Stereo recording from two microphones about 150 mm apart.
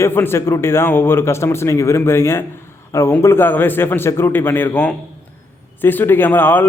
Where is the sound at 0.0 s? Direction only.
15° left (ahead or behind).